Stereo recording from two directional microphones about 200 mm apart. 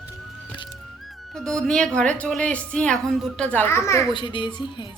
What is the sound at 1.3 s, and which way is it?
A woman's voice, 5° left (ahead or behind).